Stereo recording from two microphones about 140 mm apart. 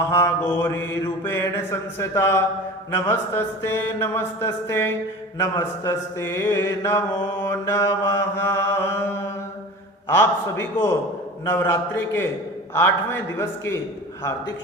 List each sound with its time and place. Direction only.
0.1 s mantra: 15° left (ahead or behind)
10.1 s mantra: 15° left (ahead or behind)